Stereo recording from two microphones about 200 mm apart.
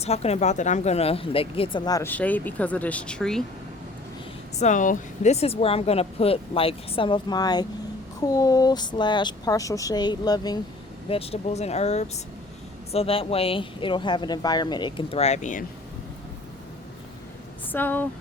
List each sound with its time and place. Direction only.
0.0 s speech: 30° left (ahead or behind); by 3.4 s 5° left (ahead or behind)
4.6 s speech: 40° left (ahead or behind); by 10.6 s 20° left (ahead or behind)
11.1 s speech: 30° left (ahead or behind)
17.7 s speech: 10° left (ahead or behind)